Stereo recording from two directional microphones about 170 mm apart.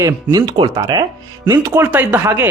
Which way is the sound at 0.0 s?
20° right (ahead or behind).